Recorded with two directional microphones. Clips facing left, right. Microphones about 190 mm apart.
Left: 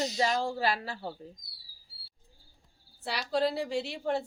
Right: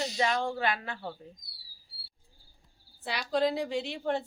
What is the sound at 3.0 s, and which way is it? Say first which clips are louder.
A woman's voice: right 1 dB; centre (ahead or behind).